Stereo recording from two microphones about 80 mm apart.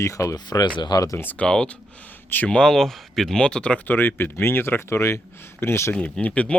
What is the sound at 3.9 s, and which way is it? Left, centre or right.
Speech, left.